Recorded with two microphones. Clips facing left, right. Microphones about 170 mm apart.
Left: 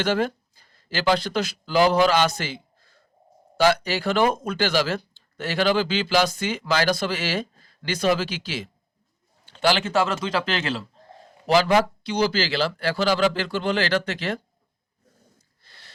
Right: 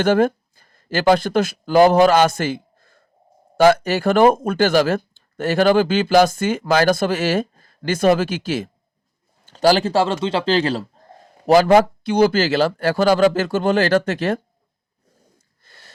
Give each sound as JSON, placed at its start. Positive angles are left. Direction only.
{"t": 0.0, "sound": "speech", "side_deg": -50}
{"t": 9.5, "sound": "a man's voice", "side_deg": -40}
{"t": 11.4, "sound": "speech", "side_deg": -45}
{"t": 15.4, "sound": "wheeze", "side_deg": -50}